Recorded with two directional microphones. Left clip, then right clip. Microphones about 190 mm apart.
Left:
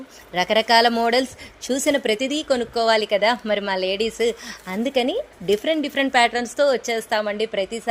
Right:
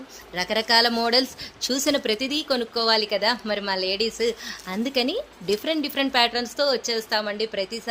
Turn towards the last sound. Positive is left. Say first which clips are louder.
# left 3 dB
turn(degrees=25)  # may be behind; listen again after turning